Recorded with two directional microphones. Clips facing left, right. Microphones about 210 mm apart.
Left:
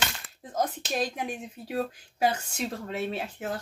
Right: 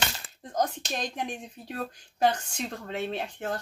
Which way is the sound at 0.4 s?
5° left (ahead or behind).